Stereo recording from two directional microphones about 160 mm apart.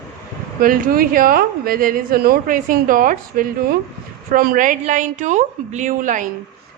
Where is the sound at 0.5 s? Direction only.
65° right (ahead or behind).